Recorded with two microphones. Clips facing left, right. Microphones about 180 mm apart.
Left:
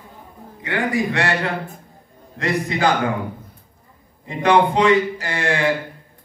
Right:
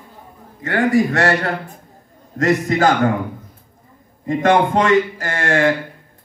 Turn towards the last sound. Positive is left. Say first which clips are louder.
# right 4 dB
turn(degrees=-50)  # may be behind; listen again after turning